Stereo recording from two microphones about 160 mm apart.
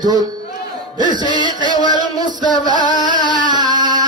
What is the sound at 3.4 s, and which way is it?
Carnatic music, 25° right (ahead or behind).